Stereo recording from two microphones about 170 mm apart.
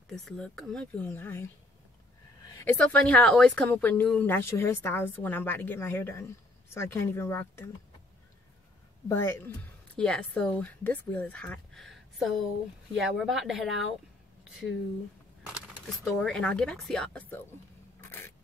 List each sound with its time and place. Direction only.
0.1 s speech: centre (ahead or behind)
2.6 s speech: 10° left (ahead or behind)
9.1 s speech: 15° left (ahead or behind)
16.0 s speech: centre (ahead or behind)